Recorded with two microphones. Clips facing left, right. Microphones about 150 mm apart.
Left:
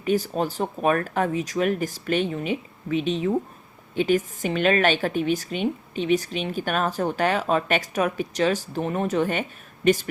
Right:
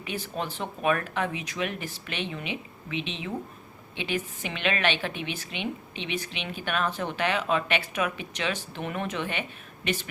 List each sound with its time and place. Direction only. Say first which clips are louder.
0.0 s a woman's voice: left 10 dB; 40° left (ahead or behind)